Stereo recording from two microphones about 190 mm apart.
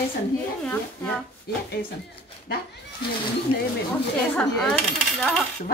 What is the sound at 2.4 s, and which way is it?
Speech, 60° left (ahead or behind).